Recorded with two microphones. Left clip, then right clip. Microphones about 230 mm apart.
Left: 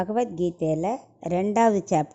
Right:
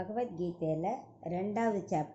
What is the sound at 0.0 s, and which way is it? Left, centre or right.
A woman's voice, left.